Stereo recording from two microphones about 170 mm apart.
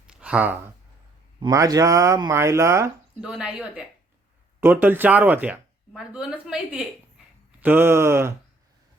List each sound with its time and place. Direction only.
0.1 s a sound: 5° right (ahead or behind)
1.4 s speech: 20° right (ahead or behind)
3.2 s speech: 5° right (ahead or behind)